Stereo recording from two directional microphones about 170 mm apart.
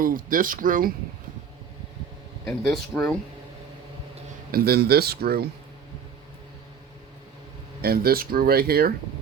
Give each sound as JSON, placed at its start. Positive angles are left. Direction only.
{"t": 0.0, "sound": "speech", "side_deg": -55}
{"t": 2.5, "sound": "speech", "side_deg": 5}
{"t": 4.5, "sound": "speech", "side_deg": -65}
{"t": 7.8, "sound": "speech", "side_deg": -65}